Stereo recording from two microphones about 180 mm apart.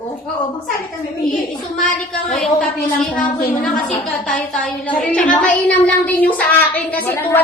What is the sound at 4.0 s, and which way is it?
A woman's voice, centre (ahead or behind).